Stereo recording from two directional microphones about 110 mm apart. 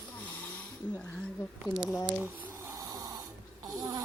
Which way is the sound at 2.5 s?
25° right (ahead or behind).